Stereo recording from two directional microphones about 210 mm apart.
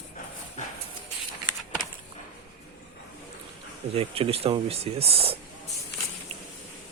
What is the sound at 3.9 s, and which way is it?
Speech, 25° right (ahead or behind).